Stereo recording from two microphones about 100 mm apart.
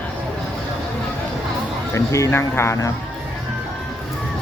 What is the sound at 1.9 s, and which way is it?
Speech, 30° left (ahead or behind).